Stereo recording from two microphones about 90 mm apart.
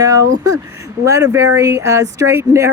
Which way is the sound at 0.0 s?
40° right (ahead or behind).